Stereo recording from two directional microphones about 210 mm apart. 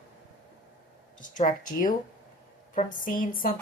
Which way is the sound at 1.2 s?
40° left (ahead or behind).